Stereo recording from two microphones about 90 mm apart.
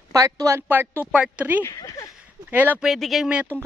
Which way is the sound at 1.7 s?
35° left (ahead or behind).